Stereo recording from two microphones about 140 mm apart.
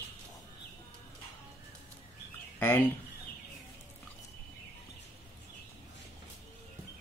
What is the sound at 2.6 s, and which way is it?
Speech, 15° left (ahead or behind).